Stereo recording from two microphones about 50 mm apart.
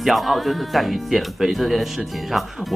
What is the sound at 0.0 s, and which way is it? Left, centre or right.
Speech, centre.